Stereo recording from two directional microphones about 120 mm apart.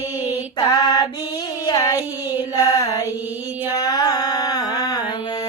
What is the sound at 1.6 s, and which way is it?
Child singing, 30° left (ahead or behind).